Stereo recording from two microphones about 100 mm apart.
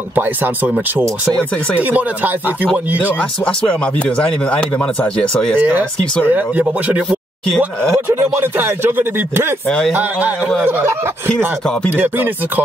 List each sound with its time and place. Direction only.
0.1 s speech: 20° right (ahead or behind)
1.8 s speech: 15° right (ahead or behind)
3.2 s speech: 10° left (ahead or behind)
5.6 s speech: 20° right (ahead or behind)
7.1 s speech: 5° left (ahead or behind)
7.9 s speech: 25° right (ahead or behind)
9.7 s speech: 5° left (ahead or behind)
9.9 s speech: 15° right (ahead or behind)
12.0 s speech: 20° right (ahead or behind)